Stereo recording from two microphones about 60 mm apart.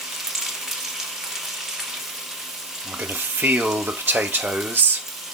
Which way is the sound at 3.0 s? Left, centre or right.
Right.